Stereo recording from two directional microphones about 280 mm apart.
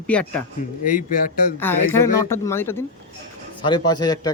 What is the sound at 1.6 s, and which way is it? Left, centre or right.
A man's voice, centre.